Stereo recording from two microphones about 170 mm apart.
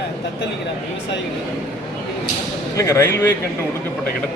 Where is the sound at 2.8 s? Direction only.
15° left (ahead or behind).